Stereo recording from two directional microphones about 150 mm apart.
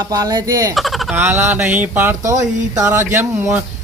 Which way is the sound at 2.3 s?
20° right (ahead or behind).